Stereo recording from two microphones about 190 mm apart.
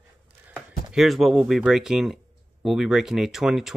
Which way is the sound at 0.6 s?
Centre (ahead or behind).